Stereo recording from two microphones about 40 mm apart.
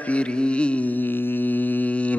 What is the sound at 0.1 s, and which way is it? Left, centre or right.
Music, left.